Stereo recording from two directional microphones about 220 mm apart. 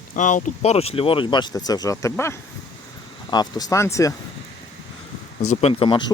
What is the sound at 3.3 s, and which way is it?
Speech, 20° left (ahead or behind).